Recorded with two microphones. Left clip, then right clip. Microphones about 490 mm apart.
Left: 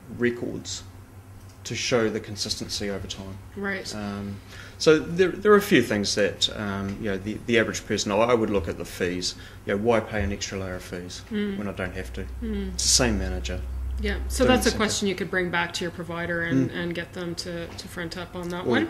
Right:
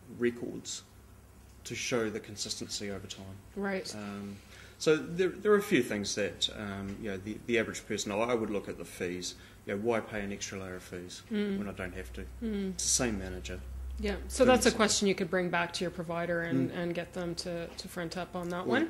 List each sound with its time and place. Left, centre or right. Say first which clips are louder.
0.2 s speech: left 7 dB; centre
3.6 s speech: left 5 dB; right
4.7 s speech: left 9 dB; left
14.0 s speech: left 3 dB; right